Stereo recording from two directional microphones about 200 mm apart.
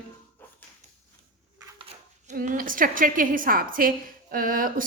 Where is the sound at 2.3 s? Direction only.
40° right (ahead or behind).